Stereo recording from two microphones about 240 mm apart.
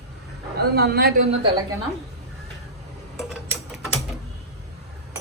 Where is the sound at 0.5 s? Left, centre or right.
Right.